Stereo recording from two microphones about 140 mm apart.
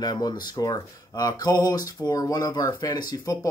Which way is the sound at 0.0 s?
30° left (ahead or behind).